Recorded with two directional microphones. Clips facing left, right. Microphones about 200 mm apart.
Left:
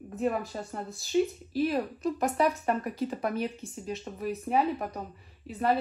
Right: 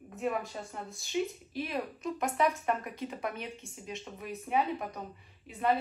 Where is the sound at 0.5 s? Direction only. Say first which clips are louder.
Left 5 dB; 35° left (ahead or behind).